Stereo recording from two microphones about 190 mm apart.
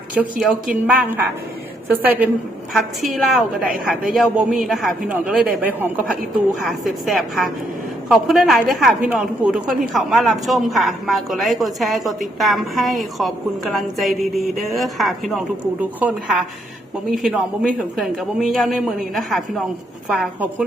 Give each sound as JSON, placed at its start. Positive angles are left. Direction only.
{"t": 0.1, "sound": "a woman's voice", "side_deg": -5}